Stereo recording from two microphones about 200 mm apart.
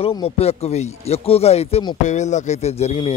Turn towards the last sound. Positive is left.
turn(degrees=30)  # may be behind; listen again after turning